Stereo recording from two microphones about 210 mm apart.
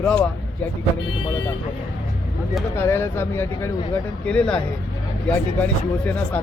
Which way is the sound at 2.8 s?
10° left (ahead or behind).